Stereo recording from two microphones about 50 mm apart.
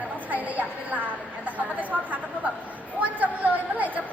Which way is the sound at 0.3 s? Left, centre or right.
Right.